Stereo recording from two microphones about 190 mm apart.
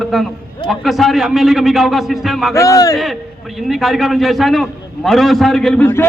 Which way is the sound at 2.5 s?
15° left (ahead or behind).